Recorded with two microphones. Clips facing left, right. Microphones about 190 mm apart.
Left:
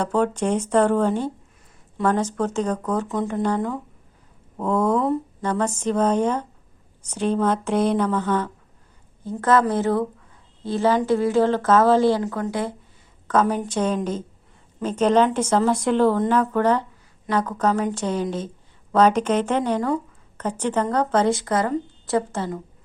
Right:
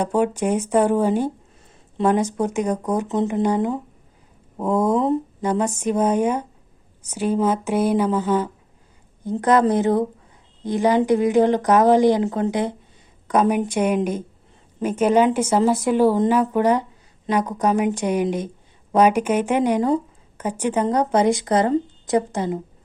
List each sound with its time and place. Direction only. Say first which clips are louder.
0.0 s a woman's voice: right 1 dB; 10° right (ahead or behind)